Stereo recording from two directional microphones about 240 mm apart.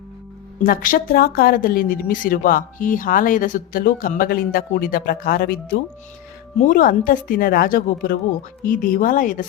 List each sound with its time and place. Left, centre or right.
0.6 s speech: left